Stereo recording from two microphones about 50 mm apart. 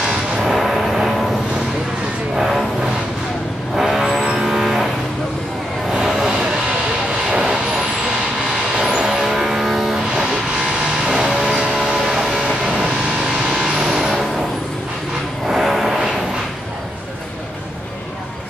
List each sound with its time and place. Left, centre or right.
0.0 s vehicle: centre
0.5 s a sound: centre
2.3 s music: centre
3.7 s vehicle: centre
5.9 s music: centre
7.2 s vehicle: centre
8.7 s vehicle: centre
15.4 s vehicle: centre